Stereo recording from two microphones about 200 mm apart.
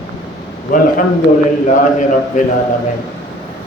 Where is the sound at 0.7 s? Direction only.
45° left (ahead or behind).